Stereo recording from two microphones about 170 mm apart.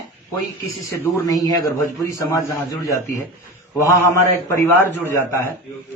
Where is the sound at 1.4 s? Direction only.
20° left (ahead or behind).